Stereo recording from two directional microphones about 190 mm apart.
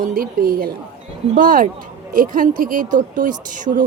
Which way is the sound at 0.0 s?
50° right (ahead or behind).